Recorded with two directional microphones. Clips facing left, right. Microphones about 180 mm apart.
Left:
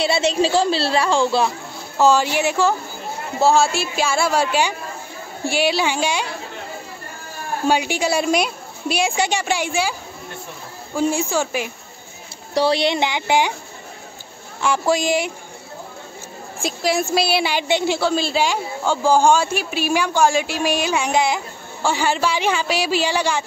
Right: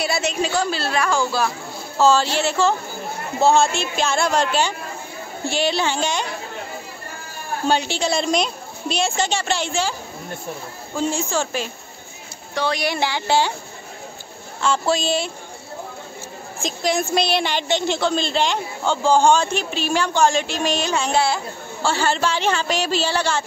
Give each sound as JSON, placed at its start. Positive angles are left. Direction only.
{"t": 0.0, "sound": "a woman's voice", "side_deg": 30}
{"t": 2.0, "sound": "a woman's voice", "side_deg": 15}
{"t": 7.6, "sound": "a woman's voice", "side_deg": 10}
{"t": 11.0, "sound": "a woman's voice", "side_deg": 10}
{"t": 12.5, "sound": "a woman's voice", "side_deg": 30}
{"t": 14.6, "sound": "a woman's voice", "side_deg": 15}
{"t": 16.6, "sound": "a woman's voice", "side_deg": 5}